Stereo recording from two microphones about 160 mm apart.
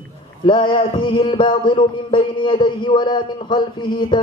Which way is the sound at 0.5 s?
30° left (ahead or behind).